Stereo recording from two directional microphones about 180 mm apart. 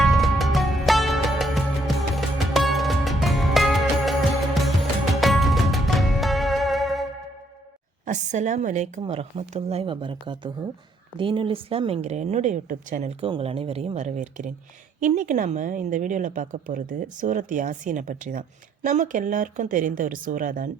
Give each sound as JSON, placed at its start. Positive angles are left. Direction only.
{"t": 0.0, "sound": "music", "side_deg": 0}
{"t": 8.0, "sound": "a woman's voice", "side_deg": -40}